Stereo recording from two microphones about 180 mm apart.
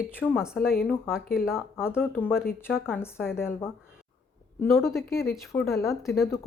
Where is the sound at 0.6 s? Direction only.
55° left (ahead or behind).